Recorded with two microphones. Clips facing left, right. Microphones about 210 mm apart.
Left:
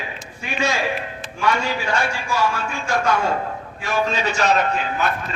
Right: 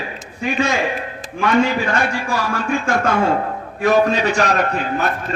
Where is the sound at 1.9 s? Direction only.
55° right (ahead or behind).